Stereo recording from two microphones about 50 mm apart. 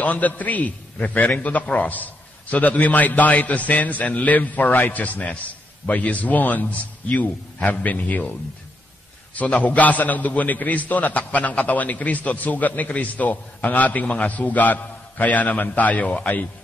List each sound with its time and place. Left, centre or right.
0.0 s a man's voice: left
9.3 s a man's voice: left